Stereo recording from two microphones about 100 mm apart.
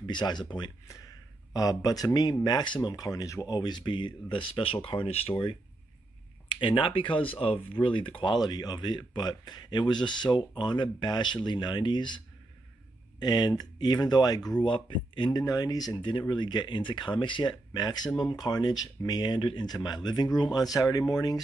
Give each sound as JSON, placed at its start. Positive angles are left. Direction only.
{"t": 0.0, "sound": "speech", "side_deg": 50}
{"t": 6.5, "sound": "speech", "side_deg": 55}
{"t": 8.2, "sound": "speech", "side_deg": 45}
{"t": 13.2, "sound": "speech", "side_deg": 45}
{"t": 14.7, "sound": "speech", "side_deg": 55}
{"t": 15.4, "sound": "speech", "side_deg": 40}
{"t": 16.0, "sound": "speech", "side_deg": 55}